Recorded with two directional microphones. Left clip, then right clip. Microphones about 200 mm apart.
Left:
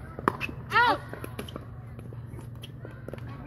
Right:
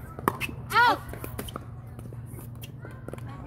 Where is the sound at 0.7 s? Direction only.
10° left (ahead or behind).